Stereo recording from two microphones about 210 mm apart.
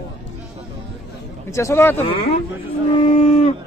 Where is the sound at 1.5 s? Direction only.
15° left (ahead or behind).